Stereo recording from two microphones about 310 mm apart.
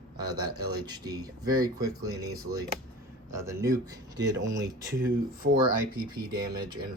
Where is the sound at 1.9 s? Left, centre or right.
Right.